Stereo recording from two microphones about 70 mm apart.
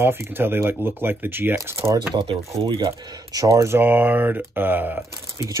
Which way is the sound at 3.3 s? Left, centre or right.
Right.